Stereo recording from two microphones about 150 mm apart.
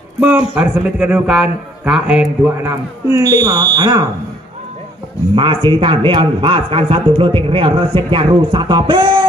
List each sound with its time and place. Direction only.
0.6 s a man's voice: 5° right (ahead or behind)
2.5 s speech: 20° right (ahead or behind)
5.3 s a man's voice: 35° right (ahead or behind)